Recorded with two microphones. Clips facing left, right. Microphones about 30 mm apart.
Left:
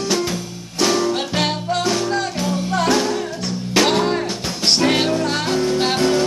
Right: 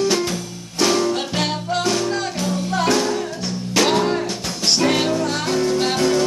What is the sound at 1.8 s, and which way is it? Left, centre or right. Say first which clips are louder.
Music: left 1 dB; centre.